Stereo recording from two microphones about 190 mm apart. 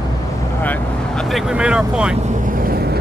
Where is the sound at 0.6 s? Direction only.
5° left (ahead or behind).